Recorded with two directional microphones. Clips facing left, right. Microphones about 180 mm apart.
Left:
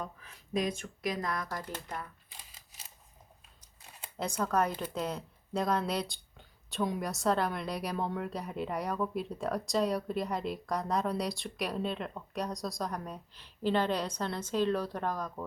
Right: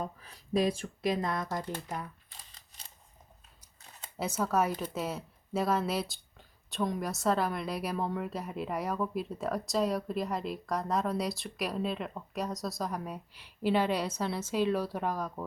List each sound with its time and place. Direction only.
0.0 s speech: 35° right (ahead or behind); by 2.0 s 20° right (ahead or behind)
2.5 s a sound: 5° left (ahead or behind)
4.2 s speech: 5° right (ahead or behind)